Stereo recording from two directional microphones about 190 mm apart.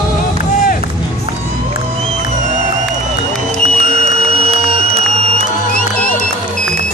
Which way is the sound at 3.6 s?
35° right (ahead or behind).